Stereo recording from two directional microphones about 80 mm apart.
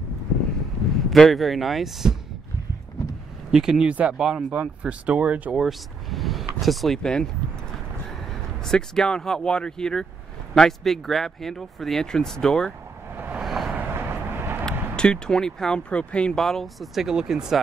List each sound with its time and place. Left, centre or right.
1.1 s speech: centre
3.5 s speech: centre
8.6 s speech: centre
13.4 s vehicle: centre
13.7 s vehicle: right
15.0 s speech: centre